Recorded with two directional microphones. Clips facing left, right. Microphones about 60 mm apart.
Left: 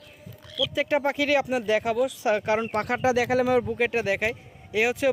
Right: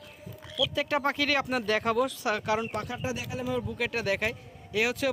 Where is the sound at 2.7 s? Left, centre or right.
Left.